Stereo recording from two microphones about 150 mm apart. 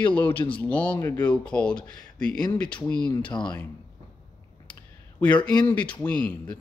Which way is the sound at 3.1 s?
30° left (ahead or behind).